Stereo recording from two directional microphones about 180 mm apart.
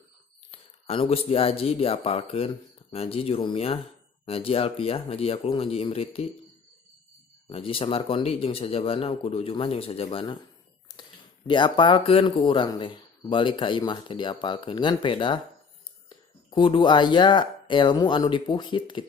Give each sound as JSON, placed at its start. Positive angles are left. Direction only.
{"t": 0.9, "sound": "speech", "side_deg": 35}
{"t": 7.5, "sound": "speech", "side_deg": 30}
{"t": 11.4, "sound": "speech", "side_deg": 25}